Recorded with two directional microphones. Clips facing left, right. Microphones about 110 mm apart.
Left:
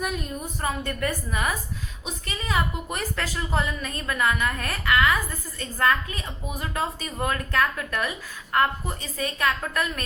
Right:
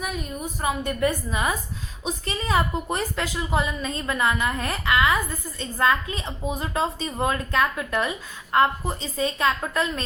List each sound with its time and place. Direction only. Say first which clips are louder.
0.0 s a woman's voice: left 1 dB; centre (ahead or behind)
0.6 s a woman's voice: right 4 dB; 15° right (ahead or behind)
2.0 s a woman's voice: right 5 dB; 30° right (ahead or behind)